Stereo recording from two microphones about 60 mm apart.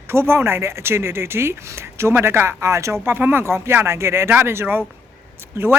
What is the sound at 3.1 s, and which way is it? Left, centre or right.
Speech, right.